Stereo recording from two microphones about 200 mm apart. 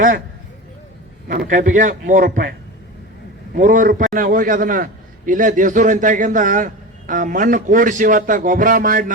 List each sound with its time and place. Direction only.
1.3 s a man's voice: 45° right (ahead or behind)
3.5 s a man's voice: 40° right (ahead or behind)